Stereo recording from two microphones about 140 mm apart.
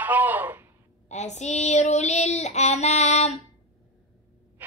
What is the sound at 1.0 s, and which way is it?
Child singing, 55° left (ahead or behind).